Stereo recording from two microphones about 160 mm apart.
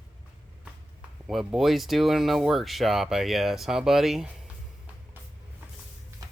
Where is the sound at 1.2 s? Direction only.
Centre (ahead or behind).